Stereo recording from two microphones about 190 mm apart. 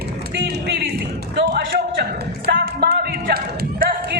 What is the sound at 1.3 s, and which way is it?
Speech, 65° right (ahead or behind).